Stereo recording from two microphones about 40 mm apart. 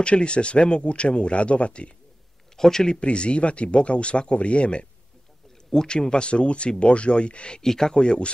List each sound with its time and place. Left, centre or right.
0.0 s speech: left
2.5 s speech: centre
3.0 s speech: left
5.7 s speech: centre
7.6 s speech: centre